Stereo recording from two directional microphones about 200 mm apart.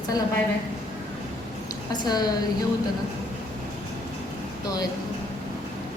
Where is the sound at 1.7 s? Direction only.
20° left (ahead or behind).